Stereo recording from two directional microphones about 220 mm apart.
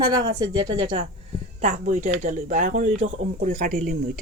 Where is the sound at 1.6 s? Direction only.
35° right (ahead or behind).